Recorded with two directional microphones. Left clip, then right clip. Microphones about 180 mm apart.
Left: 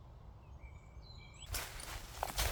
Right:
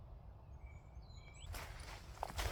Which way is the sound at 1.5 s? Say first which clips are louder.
Left 7 dB; 40° left (ahead or behind).